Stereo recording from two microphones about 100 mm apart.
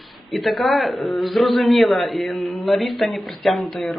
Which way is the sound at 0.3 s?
Centre (ahead or behind).